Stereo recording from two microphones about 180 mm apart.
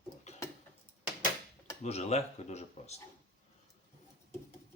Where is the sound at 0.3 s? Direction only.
35° left (ahead or behind).